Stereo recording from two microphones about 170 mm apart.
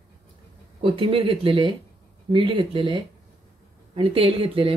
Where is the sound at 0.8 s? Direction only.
30° right (ahead or behind).